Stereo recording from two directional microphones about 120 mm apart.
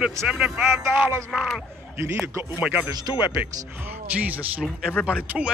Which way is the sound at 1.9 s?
20° right (ahead or behind).